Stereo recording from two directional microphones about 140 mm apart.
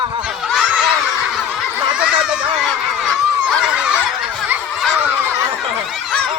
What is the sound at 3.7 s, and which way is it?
Fowl, 10° right (ahead or behind).